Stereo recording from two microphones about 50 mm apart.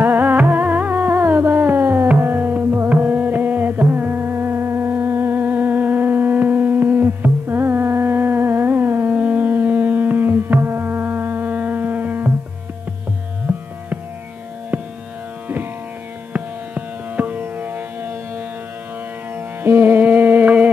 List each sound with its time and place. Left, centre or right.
0.0 s music: right
1.1 s a sound: right
1.5 s a sound: right
2.2 s carnatic music: right
9.1 s music: right
13.5 s music: right
16.3 s music: right